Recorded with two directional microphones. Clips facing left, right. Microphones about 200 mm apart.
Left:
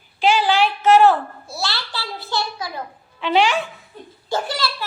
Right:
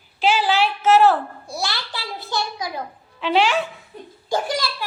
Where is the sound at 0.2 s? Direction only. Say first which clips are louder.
Left 2 dB; 5° right (ahead or behind).